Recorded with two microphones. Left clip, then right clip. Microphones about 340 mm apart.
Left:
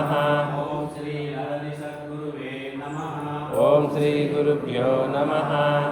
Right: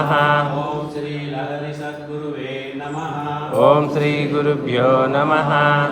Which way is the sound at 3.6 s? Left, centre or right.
Centre.